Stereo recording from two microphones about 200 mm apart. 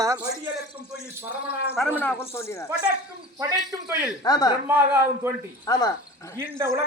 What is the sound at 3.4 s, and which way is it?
Speech, 15° right (ahead or behind).